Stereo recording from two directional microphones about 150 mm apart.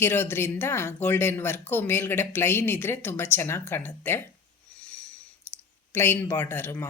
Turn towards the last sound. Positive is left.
turn(degrees=15)  # may be behind; listen again after turning